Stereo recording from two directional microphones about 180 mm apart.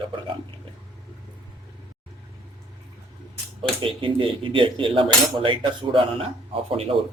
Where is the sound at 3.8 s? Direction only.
30° right (ahead or behind).